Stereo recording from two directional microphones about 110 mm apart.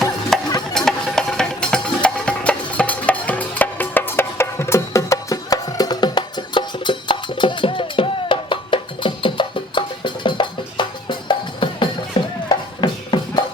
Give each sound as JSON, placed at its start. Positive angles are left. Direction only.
{"t": 0.3, "sound": "music", "side_deg": 5}